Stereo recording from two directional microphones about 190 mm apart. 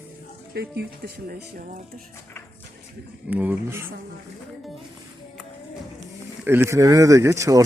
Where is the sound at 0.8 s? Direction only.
60° right (ahead or behind).